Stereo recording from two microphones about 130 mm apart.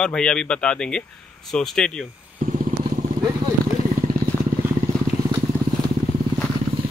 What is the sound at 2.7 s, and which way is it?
Vehicle, 90° right.